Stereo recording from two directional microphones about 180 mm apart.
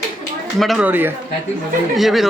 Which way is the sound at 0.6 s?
5° right (ahead or behind).